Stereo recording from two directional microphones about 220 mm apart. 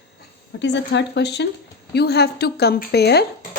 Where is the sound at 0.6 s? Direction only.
55° left (ahead or behind).